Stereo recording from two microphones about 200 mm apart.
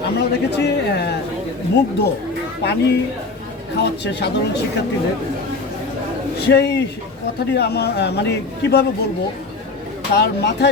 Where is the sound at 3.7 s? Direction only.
55° left (ahead or behind).